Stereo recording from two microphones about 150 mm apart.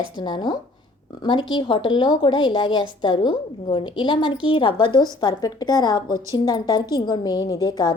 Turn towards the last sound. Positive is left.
turn(degrees=25)  # may be behind; listen again after turning